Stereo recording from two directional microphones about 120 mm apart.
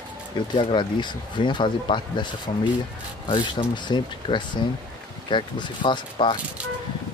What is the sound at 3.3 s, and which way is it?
Speech, 40° left (ahead or behind).